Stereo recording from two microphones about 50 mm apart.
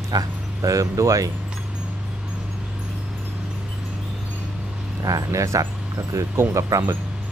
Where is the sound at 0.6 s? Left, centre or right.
Right.